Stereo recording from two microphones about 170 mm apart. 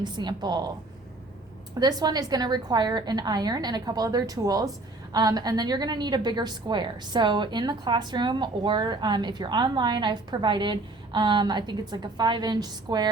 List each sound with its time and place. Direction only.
0.0 s a woman's voice: 25° right (ahead or behind)
1.8 s a woman's voice: 25° right (ahead or behind)